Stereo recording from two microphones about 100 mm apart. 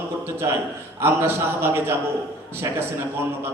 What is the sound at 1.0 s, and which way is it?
Speech, 25° right (ahead or behind).